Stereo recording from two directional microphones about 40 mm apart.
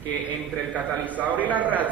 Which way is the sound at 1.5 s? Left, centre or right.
Right.